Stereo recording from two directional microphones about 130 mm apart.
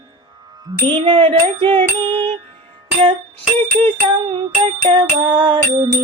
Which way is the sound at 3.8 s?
35° right (ahead or behind).